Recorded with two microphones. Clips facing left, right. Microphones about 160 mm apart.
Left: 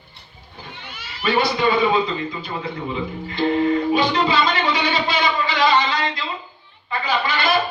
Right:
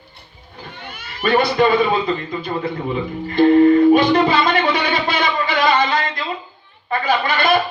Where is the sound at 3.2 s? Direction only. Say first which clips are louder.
Right 8 dB; 50° right (ahead or behind).